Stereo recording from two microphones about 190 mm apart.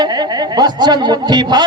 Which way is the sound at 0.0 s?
20° right (ahead or behind).